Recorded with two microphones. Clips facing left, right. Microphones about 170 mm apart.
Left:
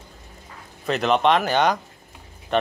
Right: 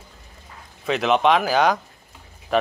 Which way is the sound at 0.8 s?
Centre (ahead or behind).